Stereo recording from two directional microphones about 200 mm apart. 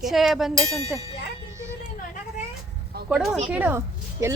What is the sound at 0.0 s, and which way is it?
Speech, centre (ahead or behind).